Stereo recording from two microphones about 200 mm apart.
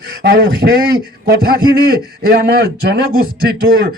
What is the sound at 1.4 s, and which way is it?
A man's voice, 50° right (ahead or behind).